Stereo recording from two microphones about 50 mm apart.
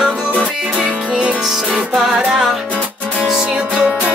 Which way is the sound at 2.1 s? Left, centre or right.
Centre.